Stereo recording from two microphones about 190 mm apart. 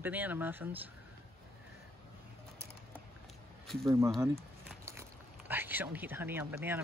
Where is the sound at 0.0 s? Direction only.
10° right (ahead or behind).